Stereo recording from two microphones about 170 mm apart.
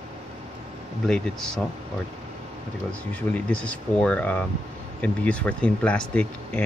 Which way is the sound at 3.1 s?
10° left (ahead or behind).